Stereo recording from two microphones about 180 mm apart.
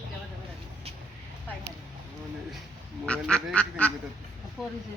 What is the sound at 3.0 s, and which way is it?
Duck, 5° left (ahead or behind).